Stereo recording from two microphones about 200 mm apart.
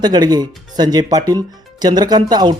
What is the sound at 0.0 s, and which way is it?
Speech, 20° right (ahead or behind).